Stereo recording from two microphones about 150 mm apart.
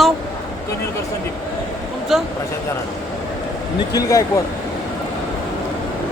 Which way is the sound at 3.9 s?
20° left (ahead or behind).